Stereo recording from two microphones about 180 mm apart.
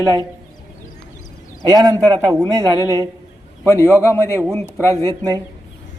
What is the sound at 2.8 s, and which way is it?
Speech, 20° left (ahead or behind).